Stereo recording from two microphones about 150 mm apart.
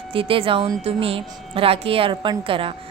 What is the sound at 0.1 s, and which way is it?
A woman's voice, 35° right (ahead or behind).